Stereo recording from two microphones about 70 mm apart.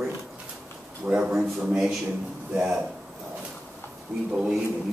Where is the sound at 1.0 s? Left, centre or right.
Centre.